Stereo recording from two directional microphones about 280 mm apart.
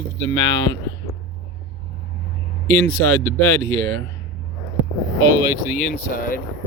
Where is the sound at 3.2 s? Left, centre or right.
Centre.